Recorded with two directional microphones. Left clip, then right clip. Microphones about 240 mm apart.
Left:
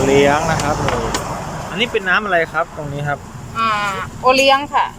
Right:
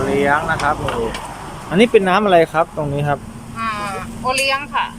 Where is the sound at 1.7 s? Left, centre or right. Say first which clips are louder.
Right 4 dB; centre.